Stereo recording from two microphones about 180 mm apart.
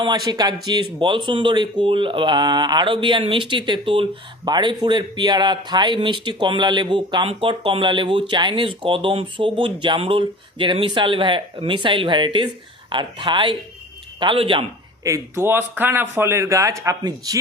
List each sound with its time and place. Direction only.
0.0 s speech: 25° right (ahead or behind)
15.0 s speech: 15° right (ahead or behind)